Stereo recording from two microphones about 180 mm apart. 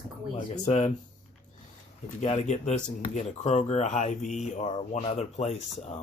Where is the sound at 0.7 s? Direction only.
40° left (ahead or behind).